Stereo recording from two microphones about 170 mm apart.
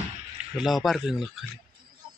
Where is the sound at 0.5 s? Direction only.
Centre (ahead or behind).